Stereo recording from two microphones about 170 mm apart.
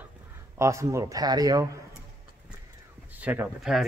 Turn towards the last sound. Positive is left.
turn(degrees=0)  # may be behind; listen again after turning